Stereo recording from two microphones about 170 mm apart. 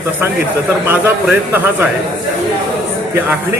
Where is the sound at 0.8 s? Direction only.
10° right (ahead or behind).